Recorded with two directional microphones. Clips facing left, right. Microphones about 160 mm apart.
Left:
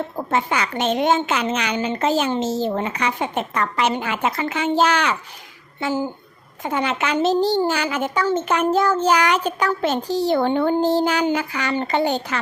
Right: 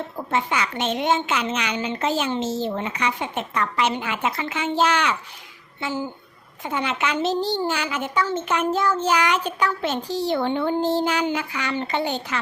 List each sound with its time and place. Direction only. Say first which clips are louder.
0.2 s a woman's voice: left 2 dB; 45° left (ahead or behind)